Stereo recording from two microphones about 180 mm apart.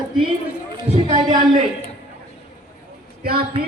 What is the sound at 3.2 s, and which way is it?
Speech, 55° right (ahead or behind).